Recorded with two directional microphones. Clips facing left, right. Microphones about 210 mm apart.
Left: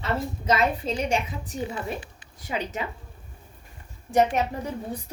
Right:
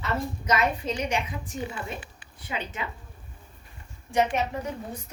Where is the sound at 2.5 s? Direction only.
40° left (ahead or behind).